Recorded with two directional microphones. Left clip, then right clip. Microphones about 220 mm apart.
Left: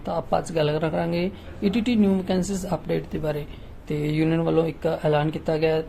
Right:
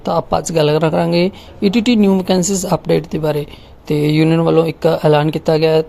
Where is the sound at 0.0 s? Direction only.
35° right (ahead or behind).